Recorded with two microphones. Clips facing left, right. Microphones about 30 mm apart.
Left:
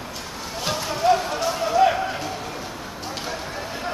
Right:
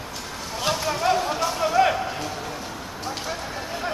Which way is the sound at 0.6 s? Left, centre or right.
Centre.